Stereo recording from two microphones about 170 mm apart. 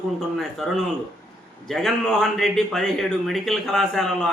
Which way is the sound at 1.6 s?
Centre (ahead or behind).